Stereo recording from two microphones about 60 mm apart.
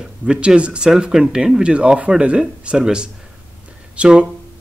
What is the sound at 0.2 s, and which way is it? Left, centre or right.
Speech, centre.